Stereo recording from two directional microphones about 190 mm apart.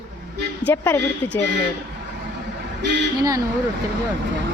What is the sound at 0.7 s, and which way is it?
Speech, 10° left (ahead or behind).